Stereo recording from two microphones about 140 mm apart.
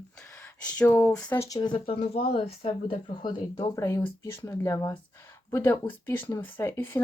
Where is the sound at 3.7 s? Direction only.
20° left (ahead or behind).